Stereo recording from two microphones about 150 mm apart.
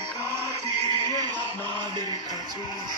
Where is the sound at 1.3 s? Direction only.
10° left (ahead or behind).